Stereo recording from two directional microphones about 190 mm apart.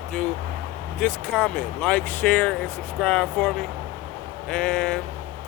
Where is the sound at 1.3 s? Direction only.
5° left (ahead or behind).